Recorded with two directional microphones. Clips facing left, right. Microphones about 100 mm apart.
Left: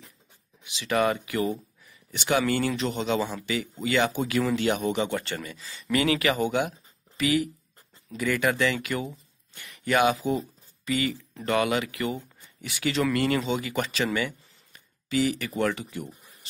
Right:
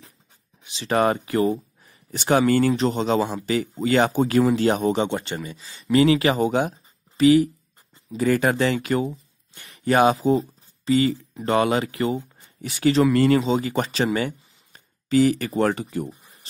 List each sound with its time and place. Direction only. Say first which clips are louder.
0.7 s speech: right 4 dB; 35° right (ahead or behind)
5.1 s speech: right 3 dB; 20° right (ahead or behind)
5.6 s speech: right 8 dB; 30° right (ahead or behind)